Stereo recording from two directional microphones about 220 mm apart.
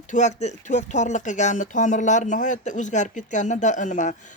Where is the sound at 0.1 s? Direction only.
30° left (ahead or behind).